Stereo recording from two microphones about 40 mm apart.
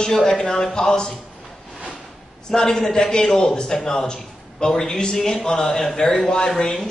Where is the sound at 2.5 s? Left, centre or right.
Centre.